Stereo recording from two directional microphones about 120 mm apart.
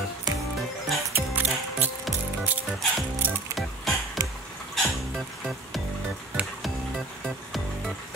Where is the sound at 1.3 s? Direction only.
15° right (ahead or behind).